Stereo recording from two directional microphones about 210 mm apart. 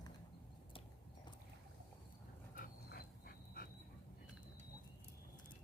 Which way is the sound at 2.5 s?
45° left (ahead or behind).